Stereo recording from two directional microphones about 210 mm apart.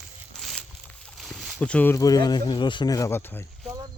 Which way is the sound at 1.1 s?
Centre (ahead or behind).